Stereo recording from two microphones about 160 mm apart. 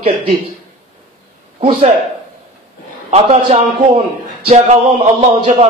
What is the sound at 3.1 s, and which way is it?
A man's voice, 40° right (ahead or behind).